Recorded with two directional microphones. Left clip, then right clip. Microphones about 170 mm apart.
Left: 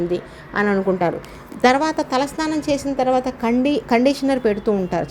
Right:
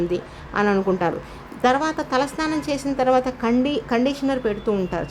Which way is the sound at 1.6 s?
15° left (ahead or behind).